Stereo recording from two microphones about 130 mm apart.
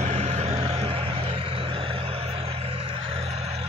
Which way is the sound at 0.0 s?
60° right (ahead or behind).